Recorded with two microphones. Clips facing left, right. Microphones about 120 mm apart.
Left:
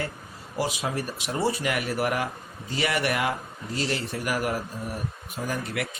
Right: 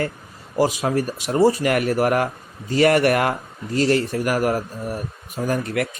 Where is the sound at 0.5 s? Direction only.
45° right (ahead or behind).